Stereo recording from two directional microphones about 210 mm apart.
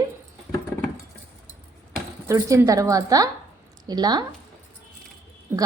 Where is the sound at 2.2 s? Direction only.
15° right (ahead or behind).